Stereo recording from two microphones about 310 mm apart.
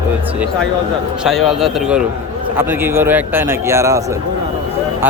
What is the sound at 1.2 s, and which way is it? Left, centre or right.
A man's voice, centre.